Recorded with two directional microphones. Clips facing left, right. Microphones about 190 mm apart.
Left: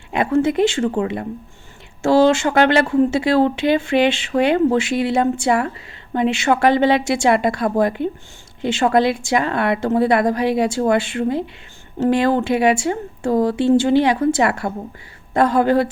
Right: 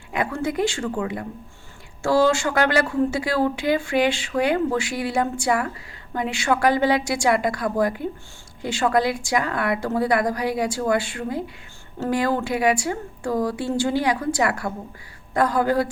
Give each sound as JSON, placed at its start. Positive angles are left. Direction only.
{"t": 0.1, "sound": "a woman's voice", "side_deg": 25}